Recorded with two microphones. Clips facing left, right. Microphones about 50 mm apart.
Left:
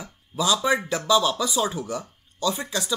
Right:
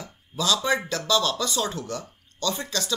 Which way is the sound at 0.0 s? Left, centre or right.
Centre.